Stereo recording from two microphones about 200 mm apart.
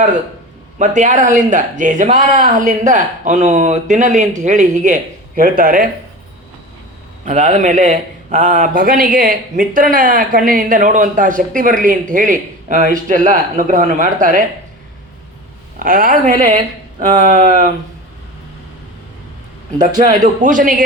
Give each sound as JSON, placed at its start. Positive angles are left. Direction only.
{"t": 0.8, "sound": "a man's voice", "side_deg": -40}
{"t": 7.3, "sound": "a man's voice", "side_deg": -35}
{"t": 15.8, "sound": "a man's voice", "side_deg": -45}
{"t": 19.8, "sound": "a man's voice", "side_deg": -40}